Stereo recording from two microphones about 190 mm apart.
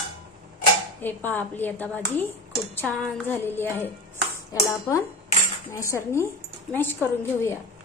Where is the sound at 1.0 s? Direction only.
10° left (ahead or behind).